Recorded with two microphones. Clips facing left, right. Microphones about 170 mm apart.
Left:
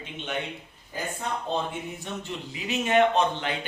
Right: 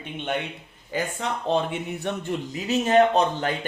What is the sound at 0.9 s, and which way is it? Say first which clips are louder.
Speech: right 4 dB; 85° right.